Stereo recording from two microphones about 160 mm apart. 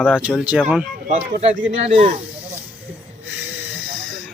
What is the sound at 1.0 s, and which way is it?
Speech, 50° right (ahead or behind).